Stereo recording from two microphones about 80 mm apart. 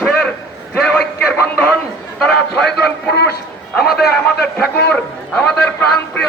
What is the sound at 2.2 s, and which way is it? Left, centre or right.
Speech, centre.